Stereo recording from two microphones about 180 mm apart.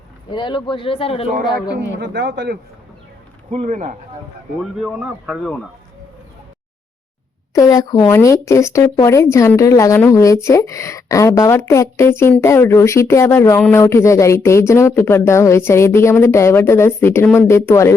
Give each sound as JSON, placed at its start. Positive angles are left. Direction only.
{"t": 0.3, "sound": "speech", "side_deg": 25}
{"t": 2.0, "sound": "speech", "side_deg": -75}
{"t": 3.5, "sound": "speech", "side_deg": -40}
{"t": 4.6, "sound": "speech", "side_deg": -5}
{"t": 7.5, "sound": "speech", "side_deg": 20}